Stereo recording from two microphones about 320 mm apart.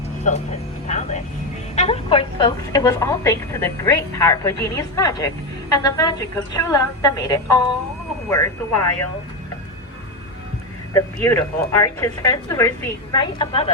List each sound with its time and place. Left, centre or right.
0.3 s a woman's voice: left
10.9 s a woman's voice: centre